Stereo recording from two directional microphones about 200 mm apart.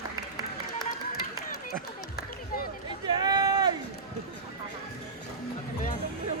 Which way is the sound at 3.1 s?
20° right (ahead or behind).